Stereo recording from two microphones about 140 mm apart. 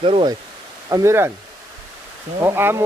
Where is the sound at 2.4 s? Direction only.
15° right (ahead or behind).